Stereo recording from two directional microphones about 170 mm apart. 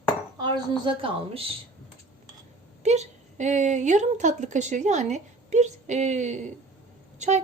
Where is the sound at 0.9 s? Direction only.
35° right (ahead or behind).